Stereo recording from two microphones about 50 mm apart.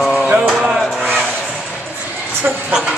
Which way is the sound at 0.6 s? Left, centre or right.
Centre.